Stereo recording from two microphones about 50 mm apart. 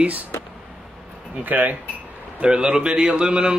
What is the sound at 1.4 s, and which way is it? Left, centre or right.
Speech, right.